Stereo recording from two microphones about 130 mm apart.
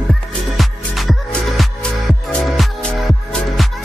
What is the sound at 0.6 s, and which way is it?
Music, centre (ahead or behind).